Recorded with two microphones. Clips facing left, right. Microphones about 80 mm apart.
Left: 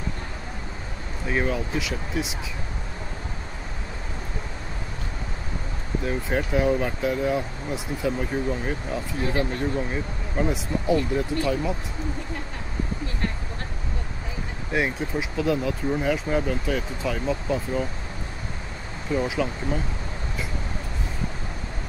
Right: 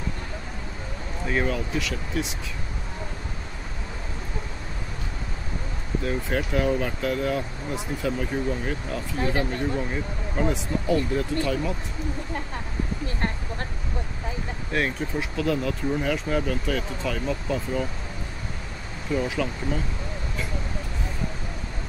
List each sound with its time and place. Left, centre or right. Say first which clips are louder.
1.2 s speech: even; centre
6.0 s speech: left 1 dB; centre
9.2 s speech: even; right
10.3 s speech: even; centre
13.2 s a sound: right 1 dB; right
14.7 s speech: left 1 dB; centre
19.1 s speech: left 1 dB; centre